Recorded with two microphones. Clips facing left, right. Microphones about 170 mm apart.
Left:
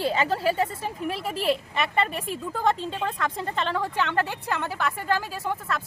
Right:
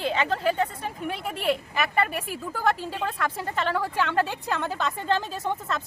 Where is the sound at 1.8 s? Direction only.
25° left (ahead or behind).